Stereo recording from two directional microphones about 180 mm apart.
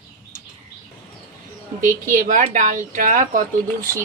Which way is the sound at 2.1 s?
45° right (ahead or behind).